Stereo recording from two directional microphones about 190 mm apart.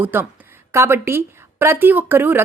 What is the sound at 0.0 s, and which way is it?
A woman's voice, 10° right (ahead or behind).